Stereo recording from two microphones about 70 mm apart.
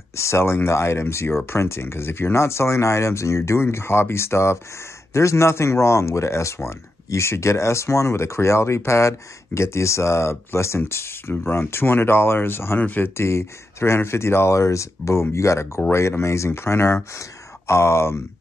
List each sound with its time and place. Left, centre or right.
0.1 s speech: left
13.1 s speech: left